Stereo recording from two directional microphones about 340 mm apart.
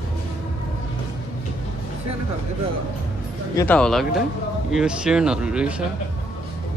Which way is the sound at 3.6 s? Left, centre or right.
Centre.